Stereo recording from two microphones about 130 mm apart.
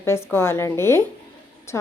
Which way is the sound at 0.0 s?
20° left (ahead or behind).